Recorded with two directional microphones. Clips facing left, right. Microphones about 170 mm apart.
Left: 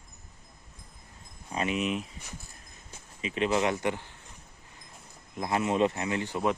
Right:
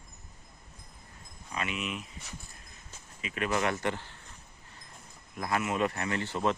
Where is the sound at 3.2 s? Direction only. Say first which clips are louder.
Left 4 dB; 25° left (ahead or behind).